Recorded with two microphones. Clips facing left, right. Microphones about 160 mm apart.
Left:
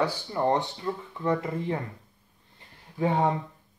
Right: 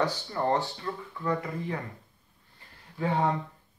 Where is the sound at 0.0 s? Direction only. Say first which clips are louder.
Left 2 dB; 15° left (ahead or behind).